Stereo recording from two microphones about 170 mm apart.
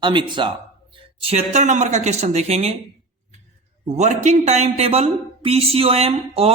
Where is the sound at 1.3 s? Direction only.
40° right (ahead or behind).